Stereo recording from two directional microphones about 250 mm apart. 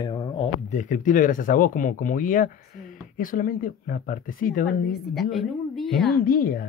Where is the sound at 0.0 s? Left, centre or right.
Centre; by 4.6 s left.